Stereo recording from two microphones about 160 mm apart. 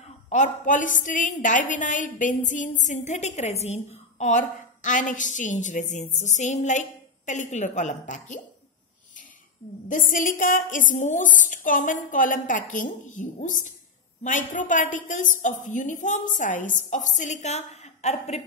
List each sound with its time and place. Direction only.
0.3 s a woman's voice: 50° left (ahead or behind)
9.8 s a woman's voice: 55° left (ahead or behind)